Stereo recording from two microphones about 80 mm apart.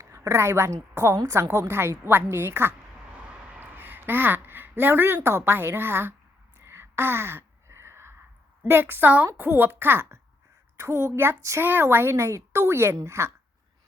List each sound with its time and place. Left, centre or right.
0.0 s a woman's voice: right
3.2 s a sound: centre
6.6 s gasp: right
8.6 s a woman's voice: right
11.6 s a woman's voice: right